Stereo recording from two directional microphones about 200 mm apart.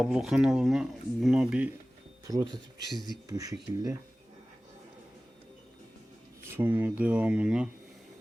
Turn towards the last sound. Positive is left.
turn(degrees=-5)  # may be behind; listen again after turning